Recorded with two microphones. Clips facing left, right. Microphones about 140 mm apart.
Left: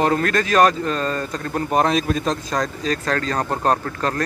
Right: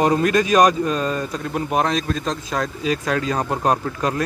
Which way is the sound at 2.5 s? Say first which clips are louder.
Even; 5° right (ahead or behind).